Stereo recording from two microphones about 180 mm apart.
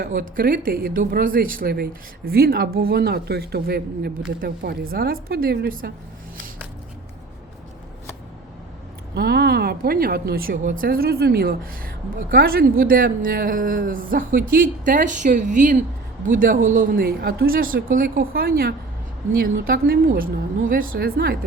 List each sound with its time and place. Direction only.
0.0 s speech: 50° right (ahead or behind)
9.1 s speech: 60° right (ahead or behind)